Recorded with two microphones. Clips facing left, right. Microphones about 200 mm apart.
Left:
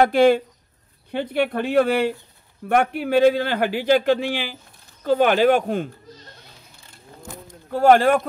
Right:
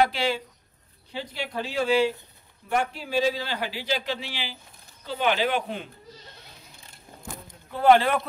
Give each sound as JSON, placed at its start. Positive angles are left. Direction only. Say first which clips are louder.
{"t": 0.0, "sound": "a man's voice", "louder": "left 9 dB", "side_deg": 55}
{"t": 7.7, "sound": "speech", "louder": "left 4 dB", "side_deg": 45}